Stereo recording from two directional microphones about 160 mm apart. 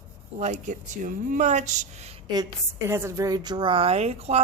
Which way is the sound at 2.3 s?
20° right (ahead or behind).